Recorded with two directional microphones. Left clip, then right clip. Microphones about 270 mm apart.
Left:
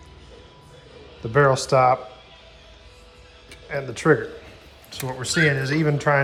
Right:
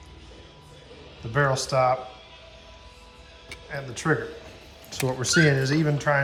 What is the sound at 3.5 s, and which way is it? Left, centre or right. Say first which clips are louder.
Speech: left 6 dB; centre.